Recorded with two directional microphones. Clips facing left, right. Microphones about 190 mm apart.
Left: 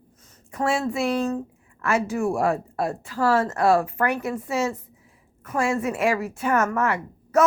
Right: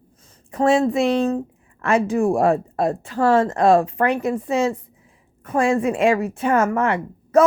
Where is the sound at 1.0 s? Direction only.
20° right (ahead or behind).